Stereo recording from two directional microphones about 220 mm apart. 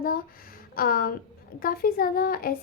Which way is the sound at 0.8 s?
40° left (ahead or behind).